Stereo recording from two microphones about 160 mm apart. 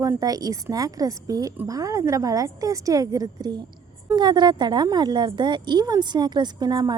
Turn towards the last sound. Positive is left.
turn(degrees=-25)  # may be behind; listen again after turning